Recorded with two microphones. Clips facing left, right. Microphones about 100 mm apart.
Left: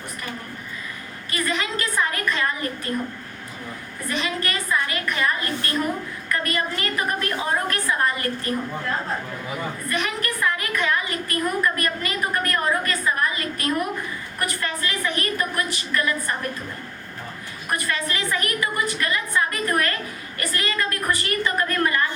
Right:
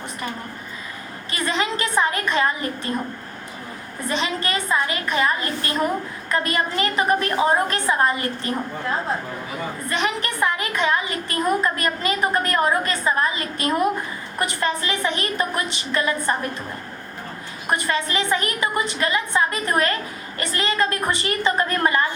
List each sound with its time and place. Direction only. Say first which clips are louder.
1.3 s a woman's voice: right 2 dB; 25° right (ahead or behind)
4.1 s a woman's voice: right 2 dB; 20° right (ahead or behind)
9.9 s a woman's voice: right 3 dB; 20° right (ahead or behind)
17.7 s a woman's voice: right 3 dB; 20° right (ahead or behind)